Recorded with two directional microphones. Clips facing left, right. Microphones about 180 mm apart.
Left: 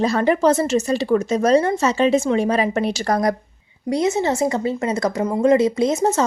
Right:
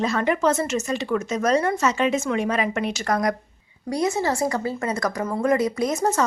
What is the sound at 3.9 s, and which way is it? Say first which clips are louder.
A woman's voice: left 4 dB; 25° left (ahead or behind).